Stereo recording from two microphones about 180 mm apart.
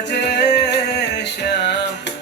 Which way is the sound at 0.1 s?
70° left (ahead or behind).